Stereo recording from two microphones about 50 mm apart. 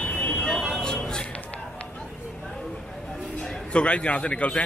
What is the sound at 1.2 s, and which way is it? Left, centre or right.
Run, left.